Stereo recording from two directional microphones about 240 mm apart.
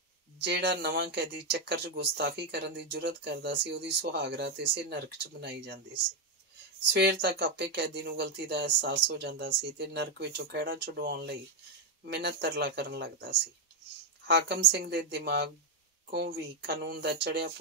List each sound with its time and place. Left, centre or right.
0.4 s speech: right
6.9 s speech: right